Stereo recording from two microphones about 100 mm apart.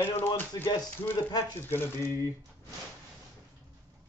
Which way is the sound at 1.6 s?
25° left (ahead or behind).